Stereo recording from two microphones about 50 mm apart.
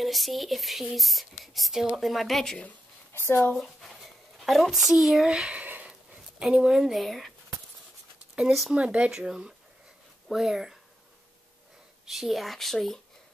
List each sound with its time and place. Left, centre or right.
0.0 s speech: centre
3.1 s speech: left
4.4 s speech: centre
5.3 s speech: right
5.7 s a sound: right
6.1 s speech: centre
6.9 s speech: centre
8.4 s speech: centre
8.7 s speech: right
9.1 s speech: centre
12.1 s speech: centre